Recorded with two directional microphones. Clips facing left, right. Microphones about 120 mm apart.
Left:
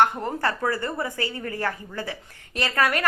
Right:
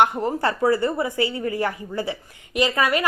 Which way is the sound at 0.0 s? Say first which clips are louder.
Right 2 dB; 15° right (ahead or behind).